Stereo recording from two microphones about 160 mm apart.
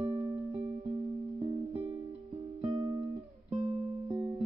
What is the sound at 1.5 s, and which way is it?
Music, 45° right (ahead or behind).